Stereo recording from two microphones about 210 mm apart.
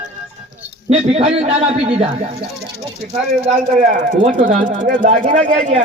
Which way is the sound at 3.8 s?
35° right (ahead or behind).